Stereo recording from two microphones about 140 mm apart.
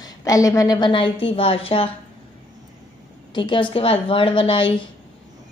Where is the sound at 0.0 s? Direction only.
25° left (ahead or behind); by 1.9 s 40° left (ahead or behind).